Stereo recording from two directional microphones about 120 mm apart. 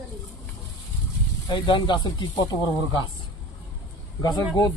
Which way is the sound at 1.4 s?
40° left (ahead or behind).